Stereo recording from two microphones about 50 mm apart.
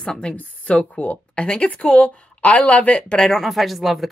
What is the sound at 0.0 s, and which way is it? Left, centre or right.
A woman's voice, centre.